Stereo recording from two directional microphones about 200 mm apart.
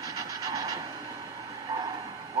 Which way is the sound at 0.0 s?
20° right (ahead or behind).